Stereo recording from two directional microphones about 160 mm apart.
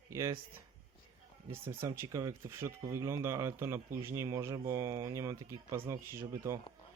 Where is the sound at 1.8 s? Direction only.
20° right (ahead or behind).